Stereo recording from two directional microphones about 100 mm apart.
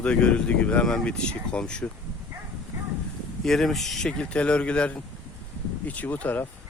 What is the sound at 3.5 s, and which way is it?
Speech, 5° left (ahead or behind).